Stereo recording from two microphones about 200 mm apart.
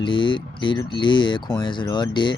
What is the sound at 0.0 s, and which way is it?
Speech, 25° left (ahead or behind).